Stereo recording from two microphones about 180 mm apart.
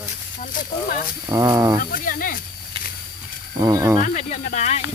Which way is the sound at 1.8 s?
50° left (ahead or behind).